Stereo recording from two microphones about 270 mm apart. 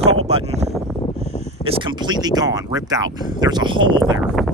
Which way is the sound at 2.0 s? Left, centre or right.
Centre.